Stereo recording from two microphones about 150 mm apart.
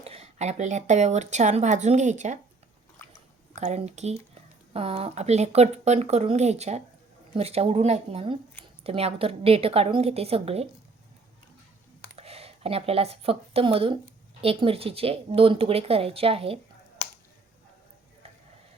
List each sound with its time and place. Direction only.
0.0 s speech: 45° right (ahead or behind)
3.5 s speech: 50° right (ahead or behind)
12.1 s speech: 45° right (ahead or behind)